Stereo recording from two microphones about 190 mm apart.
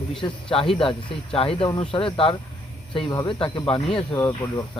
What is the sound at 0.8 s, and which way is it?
Speech, 25° left (ahead or behind).